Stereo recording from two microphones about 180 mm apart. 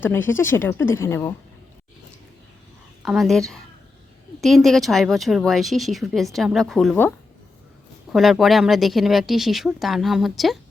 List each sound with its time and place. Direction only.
0.0 s a woman's voice: 10° left (ahead or behind)
3.0 s speech: centre (ahead or behind)
8.1 s speech: centre (ahead or behind)